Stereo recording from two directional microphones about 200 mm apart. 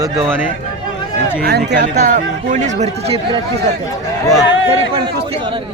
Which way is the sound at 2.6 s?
35° right (ahead or behind).